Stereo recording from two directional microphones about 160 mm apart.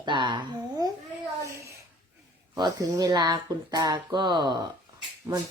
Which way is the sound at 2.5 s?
25° right (ahead or behind).